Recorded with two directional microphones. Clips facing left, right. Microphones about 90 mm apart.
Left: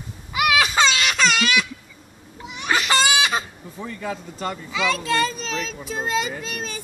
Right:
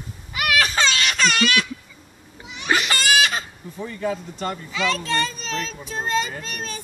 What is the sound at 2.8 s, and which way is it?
Baby cry, 20° left (ahead or behind).